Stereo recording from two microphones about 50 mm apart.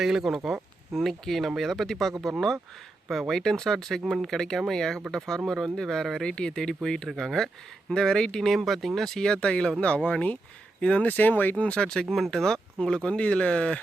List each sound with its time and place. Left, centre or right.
0.0 s speech: centre
8.5 s speech: centre
9.0 s speech: centre
11.0 s speech: left; by 12.0 s centre
12.0 s speech: centre; by 13.7 s left